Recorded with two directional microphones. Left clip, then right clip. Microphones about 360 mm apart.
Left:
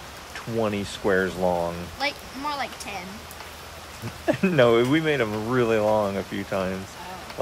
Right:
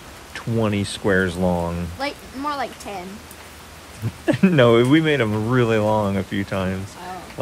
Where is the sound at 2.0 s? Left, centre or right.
Centre.